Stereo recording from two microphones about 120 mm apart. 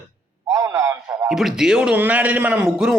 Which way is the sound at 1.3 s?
5° right (ahead or behind).